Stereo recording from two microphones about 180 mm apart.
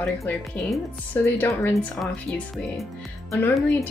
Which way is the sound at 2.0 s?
Centre (ahead or behind).